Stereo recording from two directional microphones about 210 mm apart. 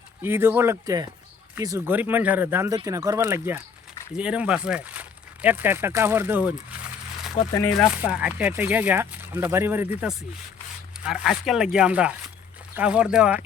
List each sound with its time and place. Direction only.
0.2 s speech: 10° right (ahead or behind)
7.4 s speech: 40° left (ahead or behind)
7.8 s speech: 5° right (ahead or behind)